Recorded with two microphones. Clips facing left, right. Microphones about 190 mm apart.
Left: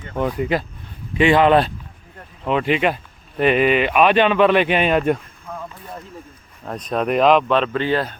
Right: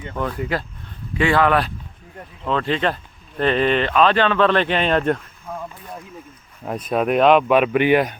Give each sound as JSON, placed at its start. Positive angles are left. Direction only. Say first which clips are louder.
{"t": 0.2, "sound": "speech", "louder": "left 4 dB", "side_deg": 20}
{"t": 2.4, "sound": "speech", "louder": "left 2 dB", "side_deg": 15}
{"t": 5.5, "sound": "a sound", "louder": "right 1 dB", "side_deg": -15}
{"t": 6.7, "sound": "speech", "louder": "right 1 dB", "side_deg": -5}